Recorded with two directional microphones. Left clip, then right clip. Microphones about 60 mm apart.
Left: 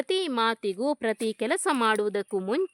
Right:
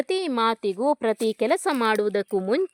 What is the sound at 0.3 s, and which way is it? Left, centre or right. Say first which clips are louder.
Speech: right 3 dB; right.